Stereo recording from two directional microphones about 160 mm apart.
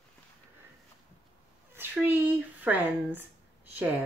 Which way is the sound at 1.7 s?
10° right (ahead or behind).